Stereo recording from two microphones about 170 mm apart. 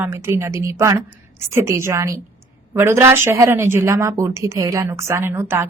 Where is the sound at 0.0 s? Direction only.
15° right (ahead or behind).